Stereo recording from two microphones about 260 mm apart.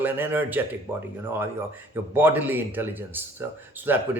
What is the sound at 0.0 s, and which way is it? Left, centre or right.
Speech, centre.